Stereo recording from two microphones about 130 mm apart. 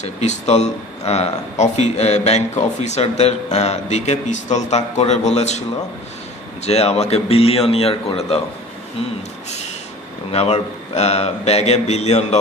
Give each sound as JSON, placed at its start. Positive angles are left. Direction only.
{"t": 0.0, "sound": "speech", "side_deg": 60}
{"t": 6.6, "sound": "speech", "side_deg": 55}
{"t": 10.3, "sound": "speech", "side_deg": 55}